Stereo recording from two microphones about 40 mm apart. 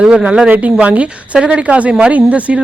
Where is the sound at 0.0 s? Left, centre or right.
Right.